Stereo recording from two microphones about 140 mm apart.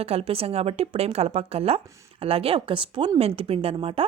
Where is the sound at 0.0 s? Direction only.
45° right (ahead or behind).